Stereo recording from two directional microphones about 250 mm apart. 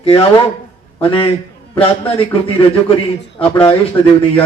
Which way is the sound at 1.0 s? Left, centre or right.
Left.